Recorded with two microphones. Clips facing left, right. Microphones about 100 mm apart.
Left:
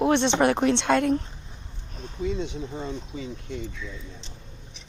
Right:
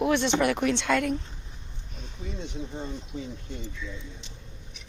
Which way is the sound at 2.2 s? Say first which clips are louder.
Left 7 dB; 90° left.